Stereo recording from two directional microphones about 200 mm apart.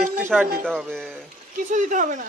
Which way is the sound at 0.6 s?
5° left (ahead or behind).